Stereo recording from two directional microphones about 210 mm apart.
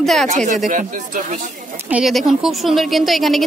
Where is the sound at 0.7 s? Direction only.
35° right (ahead or behind).